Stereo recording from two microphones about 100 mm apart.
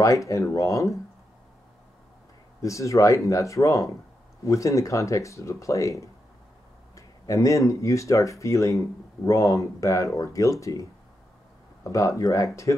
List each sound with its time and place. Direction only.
0.0 s speech: 35° left (ahead or behind)
2.6 s speech: 30° left (ahead or behind)